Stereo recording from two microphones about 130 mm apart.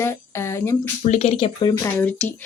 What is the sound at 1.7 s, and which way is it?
Speech, 20° left (ahead or behind).